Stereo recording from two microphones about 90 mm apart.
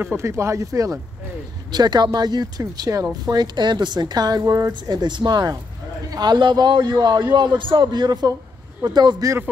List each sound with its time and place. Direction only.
0.0 s speech: 30° right (ahead or behind)
1.7 s a woman's voice: 55° right (ahead or behind)
2.8 s a woman's voice: 40° right (ahead or behind)